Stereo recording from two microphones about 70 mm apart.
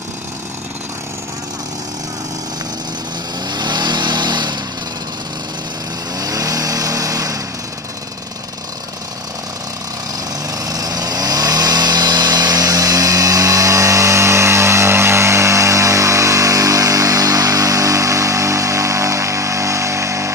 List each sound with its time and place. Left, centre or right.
3.4 s vehicle: right
6.1 s vehicle: right
10.5 s chainsaw: right